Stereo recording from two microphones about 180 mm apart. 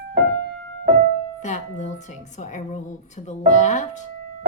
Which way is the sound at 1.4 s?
40° left (ahead or behind).